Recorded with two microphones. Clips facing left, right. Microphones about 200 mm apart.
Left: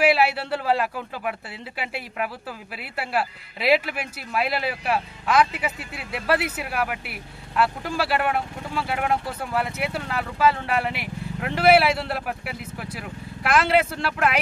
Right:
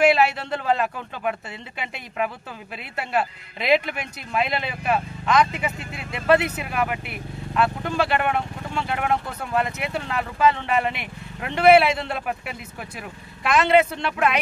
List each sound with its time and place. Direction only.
0.0 s speech: 10° left (ahead or behind)